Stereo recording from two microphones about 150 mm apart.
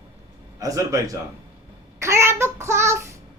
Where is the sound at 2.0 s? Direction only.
20° right (ahead or behind).